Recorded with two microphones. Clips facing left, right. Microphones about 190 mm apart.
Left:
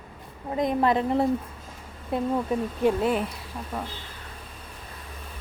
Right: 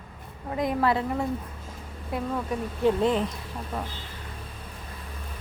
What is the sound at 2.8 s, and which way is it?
Speech, 10° left (ahead or behind).